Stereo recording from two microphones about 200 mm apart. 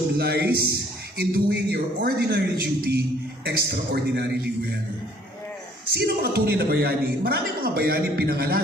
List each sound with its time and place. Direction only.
0.2 s a man's voice: 50° right (ahead or behind)
5.8 s a man's voice: 50° right (ahead or behind)